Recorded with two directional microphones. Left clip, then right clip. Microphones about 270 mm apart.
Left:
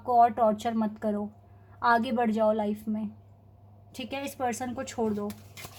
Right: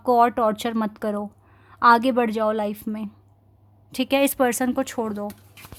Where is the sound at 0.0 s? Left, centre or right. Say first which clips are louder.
Right 4 dB; right.